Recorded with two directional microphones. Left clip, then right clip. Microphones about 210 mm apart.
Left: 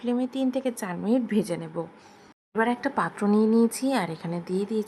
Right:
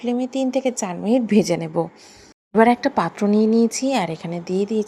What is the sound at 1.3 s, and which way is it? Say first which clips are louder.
A woman's voice: right 9 dB; 20° right (ahead or behind).